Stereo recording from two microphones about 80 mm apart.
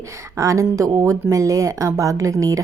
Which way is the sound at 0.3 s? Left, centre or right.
Right.